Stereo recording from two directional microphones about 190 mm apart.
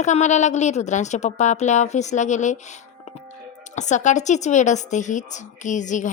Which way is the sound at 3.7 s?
40° left (ahead or behind).